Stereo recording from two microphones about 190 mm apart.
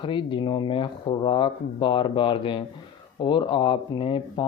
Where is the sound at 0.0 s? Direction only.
25° left (ahead or behind).